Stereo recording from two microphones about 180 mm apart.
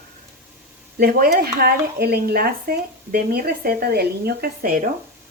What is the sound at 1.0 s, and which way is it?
Speech, 55° right (ahead or behind).